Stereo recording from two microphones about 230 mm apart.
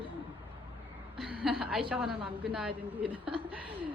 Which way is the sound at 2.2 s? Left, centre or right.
Right.